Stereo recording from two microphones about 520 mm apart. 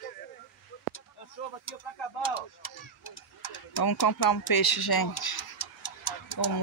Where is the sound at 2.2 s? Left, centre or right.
Left.